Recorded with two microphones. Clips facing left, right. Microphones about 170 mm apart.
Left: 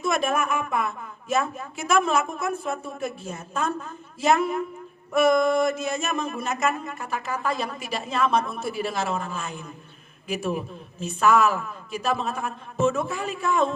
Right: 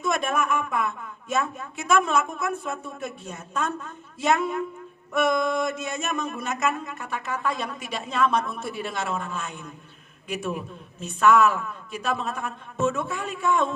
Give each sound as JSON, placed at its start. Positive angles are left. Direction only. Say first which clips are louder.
{"t": 0.0, "sound": "speech", "louder": "left 1 dB", "side_deg": 0}